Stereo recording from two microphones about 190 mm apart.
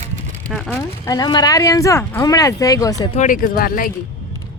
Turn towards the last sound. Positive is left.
turn(degrees=50)  # may be behind; listen again after turning